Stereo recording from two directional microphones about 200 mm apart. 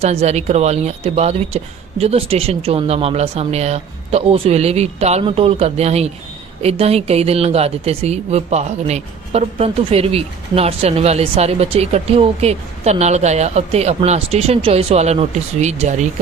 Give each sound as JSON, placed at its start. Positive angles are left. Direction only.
{"t": 0.0, "sound": "speech", "side_deg": -30}